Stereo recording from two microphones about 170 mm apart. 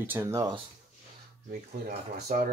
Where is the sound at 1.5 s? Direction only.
65° right (ahead or behind).